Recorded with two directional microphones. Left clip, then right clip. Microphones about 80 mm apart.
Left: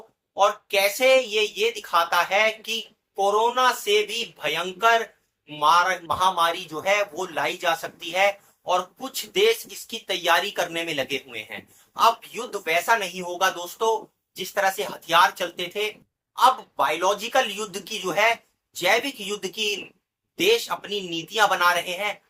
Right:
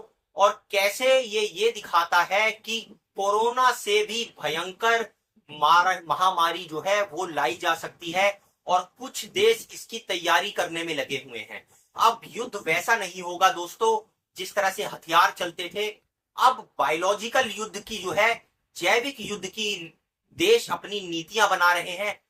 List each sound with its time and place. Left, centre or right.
0.3 s speech: left
11.9 s a woman's voice: left
20.3 s speech: left